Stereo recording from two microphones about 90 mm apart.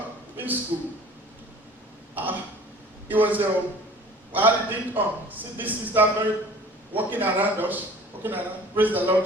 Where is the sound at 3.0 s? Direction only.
20° right (ahead or behind).